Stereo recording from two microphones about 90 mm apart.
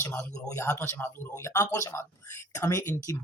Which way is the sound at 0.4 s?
30° left (ahead or behind).